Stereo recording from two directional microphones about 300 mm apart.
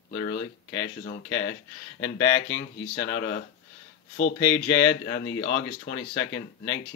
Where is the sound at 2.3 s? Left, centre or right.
Left.